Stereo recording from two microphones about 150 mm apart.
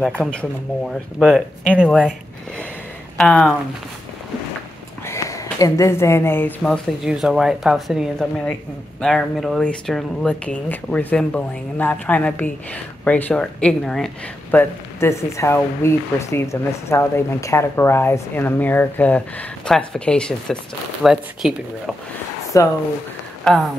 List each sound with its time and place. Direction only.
0.2 s speech: 5° left (ahead or behind)
3.2 s speech: centre (ahead or behind)
5.0 s speech: 20° left (ahead or behind); by 21.9 s 5° right (ahead or behind)
22.5 s speech: 20° left (ahead or behind)
23.4 s speech: centre (ahead or behind)